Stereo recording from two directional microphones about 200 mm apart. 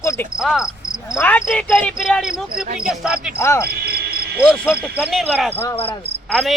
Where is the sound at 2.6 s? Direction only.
45° right (ahead or behind).